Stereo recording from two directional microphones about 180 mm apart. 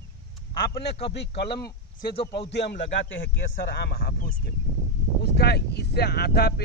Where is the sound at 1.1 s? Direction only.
65° left (ahead or behind).